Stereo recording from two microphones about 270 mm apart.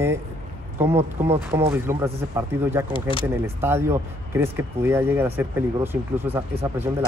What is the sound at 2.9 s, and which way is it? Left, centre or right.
Speech, centre.